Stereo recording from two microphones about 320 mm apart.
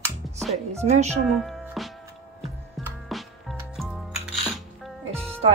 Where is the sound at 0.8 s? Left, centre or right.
Right.